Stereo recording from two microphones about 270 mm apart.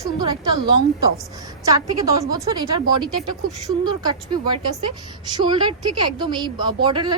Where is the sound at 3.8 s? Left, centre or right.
Centre.